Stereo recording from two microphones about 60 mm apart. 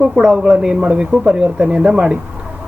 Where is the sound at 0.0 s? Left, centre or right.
Centre.